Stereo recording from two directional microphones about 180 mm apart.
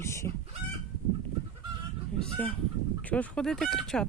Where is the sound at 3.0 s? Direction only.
10° left (ahead or behind).